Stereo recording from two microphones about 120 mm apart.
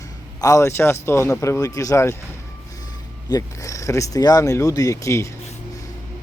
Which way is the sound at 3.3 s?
25° left (ahead or behind).